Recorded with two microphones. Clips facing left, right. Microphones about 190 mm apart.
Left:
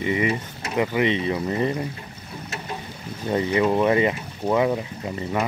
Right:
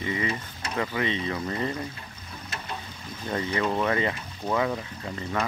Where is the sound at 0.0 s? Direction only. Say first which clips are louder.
Left 6 dB; 15° left (ahead or behind).